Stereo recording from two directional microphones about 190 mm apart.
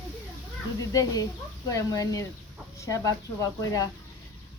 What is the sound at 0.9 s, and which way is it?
Speech, 20° left (ahead or behind).